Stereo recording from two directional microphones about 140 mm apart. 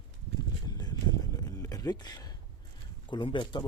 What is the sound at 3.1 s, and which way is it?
Speech, 35° left (ahead or behind).